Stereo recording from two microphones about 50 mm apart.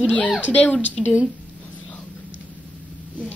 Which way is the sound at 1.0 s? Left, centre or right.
Centre.